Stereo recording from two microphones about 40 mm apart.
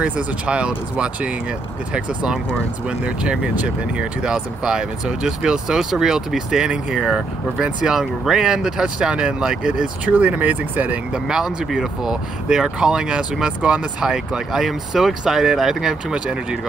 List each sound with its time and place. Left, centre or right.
0.0 s speech: right
3.6 s speech: right
7.9 s speech: centre
10.0 s speech: right
11.2 s speech: centre